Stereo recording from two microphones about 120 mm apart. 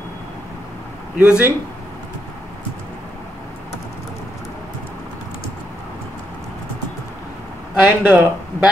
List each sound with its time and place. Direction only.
1.1 s speech: 10° right (ahead or behind)
7.8 s speech: 10° right (ahead or behind)